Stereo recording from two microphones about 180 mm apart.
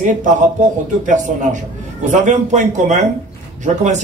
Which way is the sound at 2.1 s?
40° right (ahead or behind).